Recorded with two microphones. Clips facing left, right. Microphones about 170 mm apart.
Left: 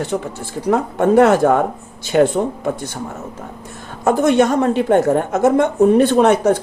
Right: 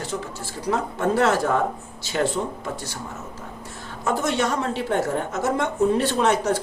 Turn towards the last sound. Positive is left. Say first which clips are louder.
# left 8 dB
turn(degrees=55)  # may be behind; listen again after turning